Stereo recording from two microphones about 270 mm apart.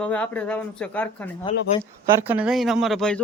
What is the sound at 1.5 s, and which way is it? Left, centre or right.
Speech, left.